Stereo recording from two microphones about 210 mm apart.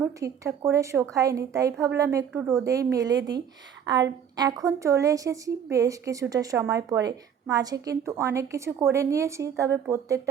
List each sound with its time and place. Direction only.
0.0 s a woman's voice: 15° right (ahead or behind)